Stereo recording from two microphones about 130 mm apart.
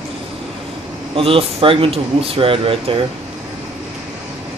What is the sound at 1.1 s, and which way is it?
Speech, 45° right (ahead or behind).